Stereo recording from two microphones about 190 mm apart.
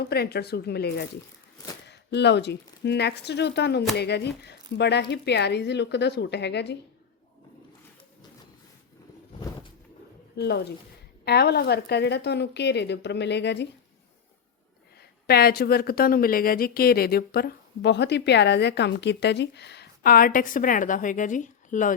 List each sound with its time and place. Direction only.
0.0 s speech: 55° left (ahead or behind)
10.3 s speech: 60° left (ahead or behind)
15.3 s speech: 55° left (ahead or behind)